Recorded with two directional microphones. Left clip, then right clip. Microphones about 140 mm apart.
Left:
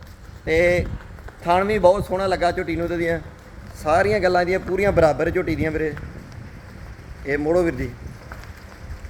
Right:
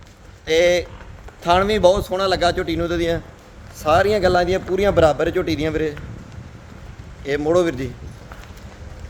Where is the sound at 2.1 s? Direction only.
5° right (ahead or behind).